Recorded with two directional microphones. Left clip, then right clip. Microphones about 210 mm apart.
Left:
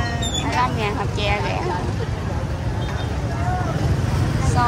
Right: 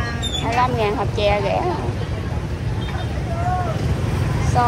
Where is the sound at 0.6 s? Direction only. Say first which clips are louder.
Right 3 dB; 10° left (ahead or behind).